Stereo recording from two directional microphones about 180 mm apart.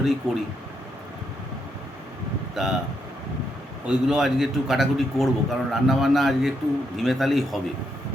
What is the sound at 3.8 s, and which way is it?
A man's voice, 5° right (ahead or behind).